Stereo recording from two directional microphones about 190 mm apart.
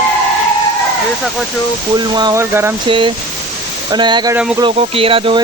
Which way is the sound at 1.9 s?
20° right (ahead or behind).